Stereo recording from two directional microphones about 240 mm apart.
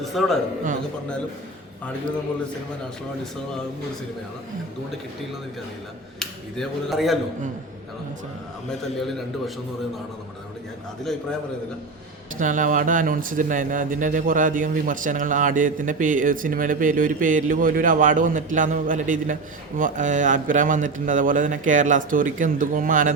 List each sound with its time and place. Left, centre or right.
0.0 s speech: centre
6.1 s speech: centre
9.0 s speech: centre
12.4 s speech: right